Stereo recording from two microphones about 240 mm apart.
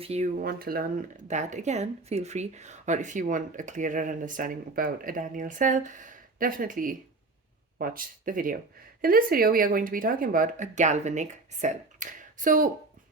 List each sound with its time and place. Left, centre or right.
0.0 s speech: right